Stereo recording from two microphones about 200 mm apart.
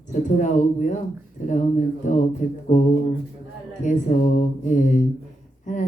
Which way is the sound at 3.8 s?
40° left (ahead or behind).